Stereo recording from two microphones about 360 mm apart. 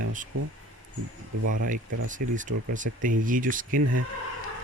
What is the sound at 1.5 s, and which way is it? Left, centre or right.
Speech, right.